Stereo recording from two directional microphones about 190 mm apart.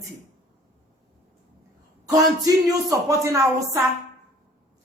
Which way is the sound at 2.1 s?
20° right (ahead or behind).